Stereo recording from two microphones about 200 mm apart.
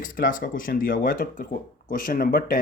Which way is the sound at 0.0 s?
45° left (ahead or behind).